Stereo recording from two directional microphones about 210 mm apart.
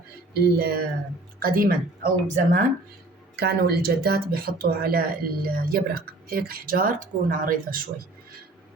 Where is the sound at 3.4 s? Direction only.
50° right (ahead or behind).